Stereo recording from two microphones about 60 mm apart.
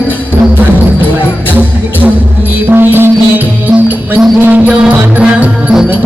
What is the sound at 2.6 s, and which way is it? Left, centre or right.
Music, right.